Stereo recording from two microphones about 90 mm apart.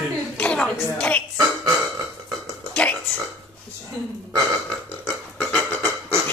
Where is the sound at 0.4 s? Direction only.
10° left (ahead or behind).